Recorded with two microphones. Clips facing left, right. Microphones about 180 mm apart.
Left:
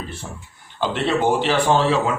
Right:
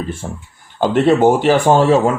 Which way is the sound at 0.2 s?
50° right (ahead or behind).